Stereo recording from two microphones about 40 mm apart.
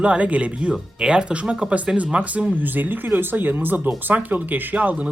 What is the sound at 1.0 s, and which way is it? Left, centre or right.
Speech, right.